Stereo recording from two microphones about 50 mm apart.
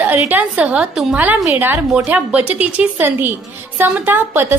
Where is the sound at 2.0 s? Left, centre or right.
Right.